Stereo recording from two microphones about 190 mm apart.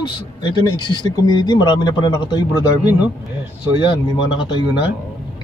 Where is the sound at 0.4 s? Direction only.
25° left (ahead or behind).